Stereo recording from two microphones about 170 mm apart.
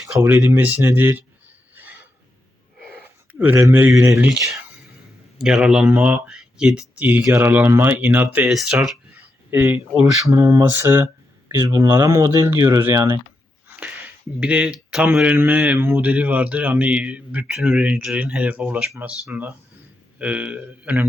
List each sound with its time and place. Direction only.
0.2 s speech: 10° right (ahead or behind)
1.7 s a sound: 10° right (ahead or behind)
4.0 s speech: 15° right (ahead or behind)
5.4 s speech: 5° right (ahead or behind)
13.7 s a sound: 10° right (ahead or behind)
14.3 s speech: 5° right (ahead or behind)